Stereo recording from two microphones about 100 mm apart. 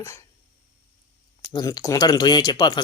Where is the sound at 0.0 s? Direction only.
30° left (ahead or behind).